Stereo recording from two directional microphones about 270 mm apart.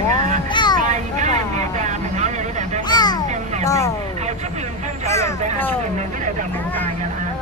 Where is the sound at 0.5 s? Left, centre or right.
Centre.